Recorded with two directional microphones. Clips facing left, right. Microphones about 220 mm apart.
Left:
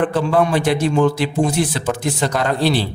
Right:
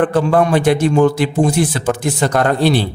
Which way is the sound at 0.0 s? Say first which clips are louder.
Right 3 dB; 50° right (ahead or behind).